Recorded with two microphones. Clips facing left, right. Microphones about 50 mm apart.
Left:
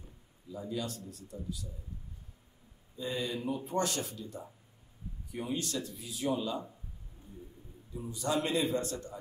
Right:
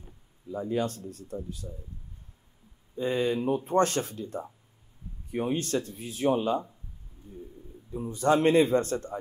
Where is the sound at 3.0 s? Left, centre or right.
Right.